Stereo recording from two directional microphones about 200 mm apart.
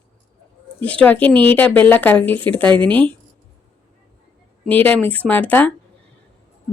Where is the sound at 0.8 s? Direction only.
10° left (ahead or behind).